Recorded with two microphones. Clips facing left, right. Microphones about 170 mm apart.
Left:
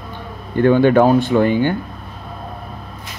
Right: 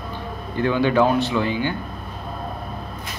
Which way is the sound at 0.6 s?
50° left (ahead or behind).